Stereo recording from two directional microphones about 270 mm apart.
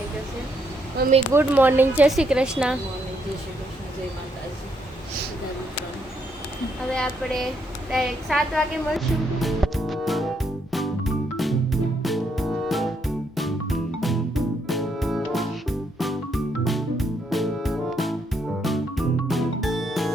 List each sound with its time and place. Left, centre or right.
1.0 s speech: right
1.3 s speech: centre
6.9 s a sound: centre
14.0 s music: centre